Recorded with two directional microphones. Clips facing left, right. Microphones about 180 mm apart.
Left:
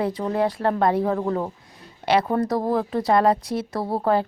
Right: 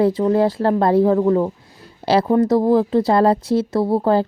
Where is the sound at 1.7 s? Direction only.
30° right (ahead or behind).